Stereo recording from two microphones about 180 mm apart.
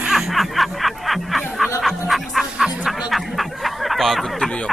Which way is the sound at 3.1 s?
Centre (ahead or behind).